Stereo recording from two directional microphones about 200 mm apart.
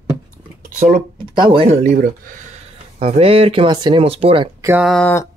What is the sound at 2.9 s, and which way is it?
Speech, 30° right (ahead or behind).